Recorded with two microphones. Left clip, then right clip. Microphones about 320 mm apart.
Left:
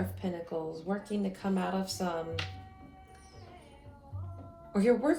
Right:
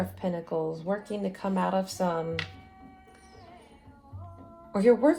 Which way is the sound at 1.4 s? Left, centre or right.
Right.